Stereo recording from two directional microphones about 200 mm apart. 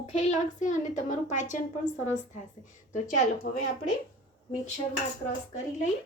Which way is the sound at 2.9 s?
40° left (ahead or behind).